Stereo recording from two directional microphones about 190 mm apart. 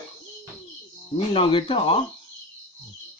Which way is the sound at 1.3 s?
30° left (ahead or behind).